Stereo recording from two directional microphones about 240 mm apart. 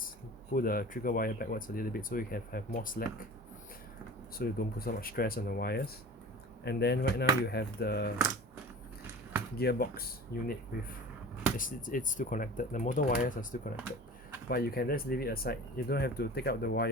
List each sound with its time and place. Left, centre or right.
0.5 s speech: left
4.4 s speech: left
9.6 s speech: left
11.5 s speech: left
14.5 s speech: left